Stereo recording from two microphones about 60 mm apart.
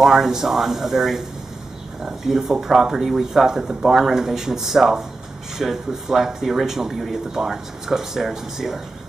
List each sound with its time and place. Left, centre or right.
0.0 s speech: centre